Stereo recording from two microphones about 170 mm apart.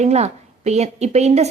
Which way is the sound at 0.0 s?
40° right (ahead or behind).